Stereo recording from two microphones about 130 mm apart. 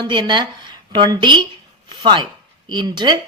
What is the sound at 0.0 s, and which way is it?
A woman's voice, 35° right (ahead or behind).